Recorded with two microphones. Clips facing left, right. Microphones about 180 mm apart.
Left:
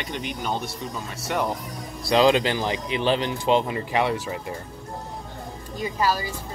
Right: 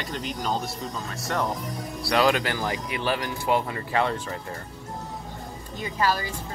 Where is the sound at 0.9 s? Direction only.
10° left (ahead or behind).